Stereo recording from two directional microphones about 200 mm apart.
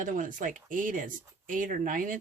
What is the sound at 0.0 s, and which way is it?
Speech, 40° right (ahead or behind).